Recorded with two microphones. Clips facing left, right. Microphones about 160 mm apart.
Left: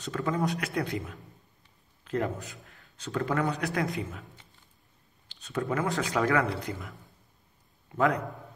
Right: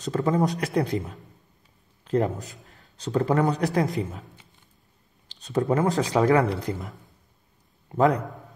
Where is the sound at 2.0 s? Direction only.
35° right (ahead or behind).